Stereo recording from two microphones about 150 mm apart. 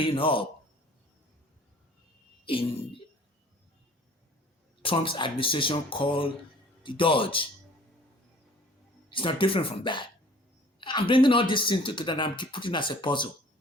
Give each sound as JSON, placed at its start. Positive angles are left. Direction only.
{"t": 0.0, "sound": "speech", "side_deg": 35}
{"t": 2.4, "sound": "speech", "side_deg": 35}
{"t": 4.8, "sound": "speech", "side_deg": 35}
{"t": 9.0, "sound": "speech", "side_deg": 35}